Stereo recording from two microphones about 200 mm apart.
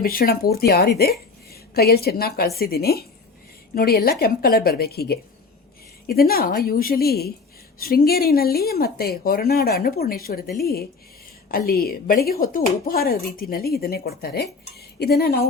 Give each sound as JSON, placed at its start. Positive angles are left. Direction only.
{"t": 0.0, "sound": "a woman's voice", "side_deg": 50}
{"t": 14.8, "sound": "cutlery", "side_deg": 50}